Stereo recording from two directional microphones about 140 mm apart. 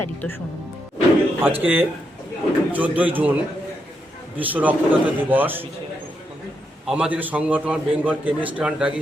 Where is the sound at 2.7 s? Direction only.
10° right (ahead or behind).